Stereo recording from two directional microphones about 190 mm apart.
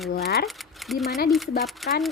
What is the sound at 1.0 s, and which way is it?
Speech, 55° left (ahead or behind).